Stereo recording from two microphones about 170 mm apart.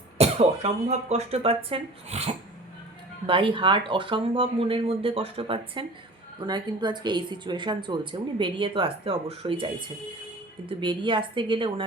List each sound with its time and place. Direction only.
0.2 s speech: 40° right (ahead or behind)
10.7 s speech: 30° right (ahead or behind)